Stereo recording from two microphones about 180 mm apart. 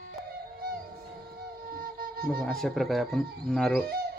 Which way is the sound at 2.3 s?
5° left (ahead or behind).